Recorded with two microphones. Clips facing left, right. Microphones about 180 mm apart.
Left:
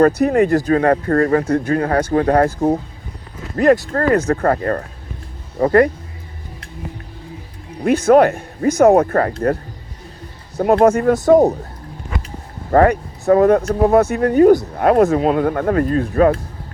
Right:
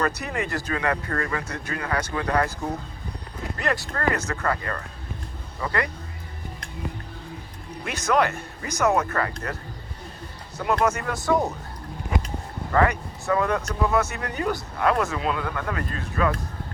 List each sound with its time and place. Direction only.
0.0 s speech: 50° left (ahead or behind)
7.9 s speech: 50° left (ahead or behind)
10.6 s speech: 50° left (ahead or behind)
12.7 s speech: 50° left (ahead or behind)